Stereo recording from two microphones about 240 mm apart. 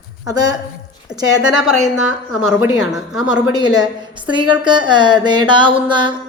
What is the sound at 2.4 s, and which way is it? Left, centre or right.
Speech, centre.